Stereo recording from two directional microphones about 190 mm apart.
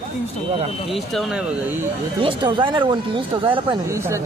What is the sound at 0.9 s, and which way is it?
Speech, centre (ahead or behind).